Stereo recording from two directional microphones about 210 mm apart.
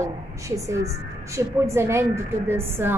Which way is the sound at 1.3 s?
10° right (ahead or behind).